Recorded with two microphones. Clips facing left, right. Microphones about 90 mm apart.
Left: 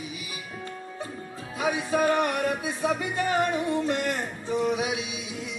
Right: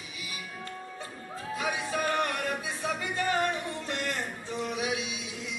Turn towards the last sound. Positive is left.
turn(degrees=20)  # may be behind; listen again after turning